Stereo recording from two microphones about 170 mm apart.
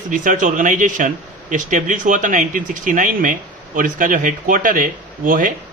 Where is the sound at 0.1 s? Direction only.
50° right (ahead or behind).